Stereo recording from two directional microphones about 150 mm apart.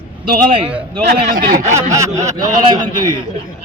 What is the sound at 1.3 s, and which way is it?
Speech, 70° right (ahead or behind).